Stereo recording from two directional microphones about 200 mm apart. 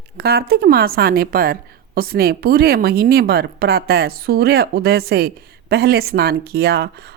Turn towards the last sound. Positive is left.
turn(degrees=-55)  # may be behind; listen again after turning